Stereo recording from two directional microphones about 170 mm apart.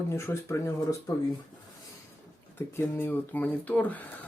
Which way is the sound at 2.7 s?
15° left (ahead or behind).